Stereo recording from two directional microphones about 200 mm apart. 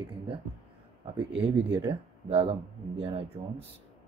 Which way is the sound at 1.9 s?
30° right (ahead or behind).